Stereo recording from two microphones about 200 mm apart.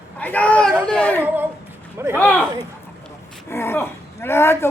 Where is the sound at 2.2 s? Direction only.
5° left (ahead or behind).